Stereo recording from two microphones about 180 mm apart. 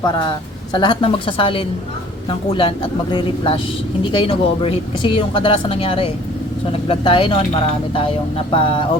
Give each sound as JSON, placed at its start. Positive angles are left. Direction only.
{"t": 0.0, "sound": "speech", "side_deg": 25}